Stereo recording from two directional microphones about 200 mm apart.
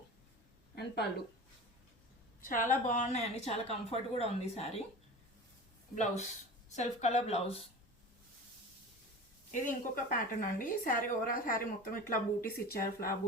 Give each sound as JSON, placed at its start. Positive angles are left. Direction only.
{"t": 2.4, "sound": "a woman's voice", "side_deg": 40}
{"t": 5.9, "sound": "a woman's voice", "side_deg": 35}
{"t": 9.5, "sound": "a woman's voice", "side_deg": 40}